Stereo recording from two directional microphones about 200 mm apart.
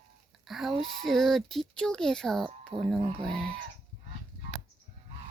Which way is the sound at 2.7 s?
15° right (ahead or behind).